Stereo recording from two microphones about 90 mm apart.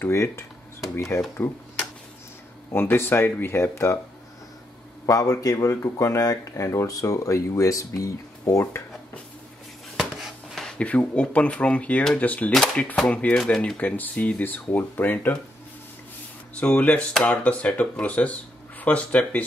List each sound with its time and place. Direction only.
0.0 s speech: 30° left (ahead or behind)
2.7 s speech: 25° left (ahead or behind)
5.0 s speech: 40° left (ahead or behind)
9.9 s speech: centre (ahead or behind); by 15.3 s 20° left (ahead or behind)
16.5 s speech: 15° left (ahead or behind)